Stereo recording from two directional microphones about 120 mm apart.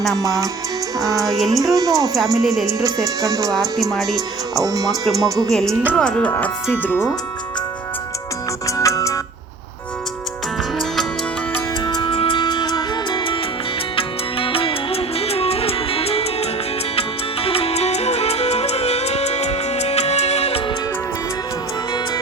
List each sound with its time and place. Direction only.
0.2 s music: 30° right (ahead or behind)
1.4 s speech: centre (ahead or behind)
1.7 s speech: 30° right (ahead or behind)
2.1 s speech: centre (ahead or behind)
3.2 s music: 30° right (ahead or behind)
3.5 s speech: centre (ahead or behind)
4.6 s speech: 30° right (ahead or behind)
5.5 s speech: 5° left (ahead or behind)
8.6 s music: 25° left (ahead or behind)
11.9 s music: 40° left (ahead or behind); by 20.6 s 60° left (ahead or behind)